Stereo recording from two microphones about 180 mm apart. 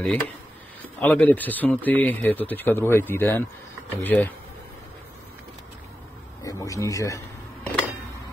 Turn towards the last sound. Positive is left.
turn(degrees=15)  # may be behind; listen again after turning